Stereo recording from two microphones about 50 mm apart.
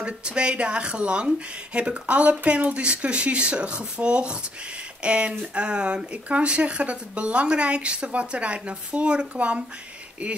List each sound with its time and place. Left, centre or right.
0.0 s speech: right